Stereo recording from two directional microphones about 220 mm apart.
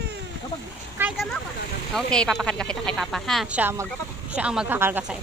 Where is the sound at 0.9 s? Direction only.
5° right (ahead or behind).